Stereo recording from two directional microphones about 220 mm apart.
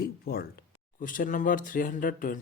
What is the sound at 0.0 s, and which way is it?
Speech, 45° left (ahead or behind).